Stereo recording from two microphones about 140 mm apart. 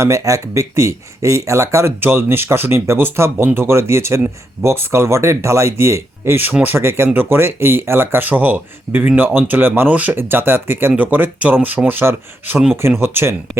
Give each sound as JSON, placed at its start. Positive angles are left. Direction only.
{"t": 0.0, "sound": "speech", "side_deg": -20}